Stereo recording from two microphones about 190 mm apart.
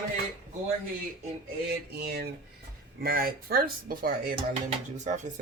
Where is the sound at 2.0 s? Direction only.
55° right (ahead or behind).